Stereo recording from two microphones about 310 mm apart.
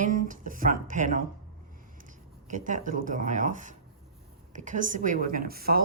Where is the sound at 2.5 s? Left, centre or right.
Right.